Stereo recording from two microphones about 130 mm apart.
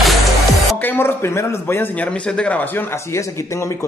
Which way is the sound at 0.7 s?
15° left (ahead or behind).